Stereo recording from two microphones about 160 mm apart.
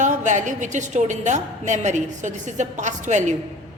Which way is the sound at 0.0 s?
50° right (ahead or behind).